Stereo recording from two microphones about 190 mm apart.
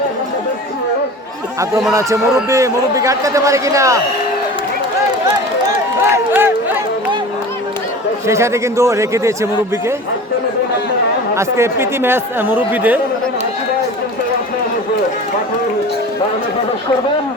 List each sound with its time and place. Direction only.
1.9 s a man's voice: 15° right (ahead or behind)
6.1 s a sound: 10° right (ahead or behind)
8.3 s a man's voice: 15° right (ahead or behind)
11.3 s a man's voice: 15° right (ahead or behind)